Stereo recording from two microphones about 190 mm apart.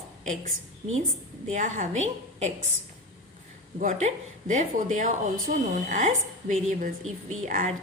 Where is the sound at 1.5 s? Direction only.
40° right (ahead or behind).